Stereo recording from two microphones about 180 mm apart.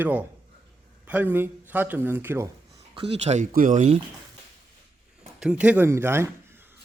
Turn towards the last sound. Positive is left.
turn(degrees=-15)  # may be behind; listen again after turning